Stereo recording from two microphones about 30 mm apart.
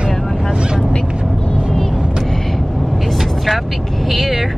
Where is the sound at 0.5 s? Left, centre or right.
Right.